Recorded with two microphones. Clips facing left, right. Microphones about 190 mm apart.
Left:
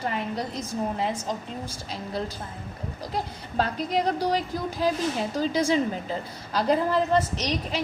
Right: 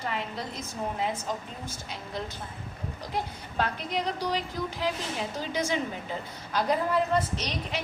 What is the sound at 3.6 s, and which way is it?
A woman's voice, 35° left (ahead or behind).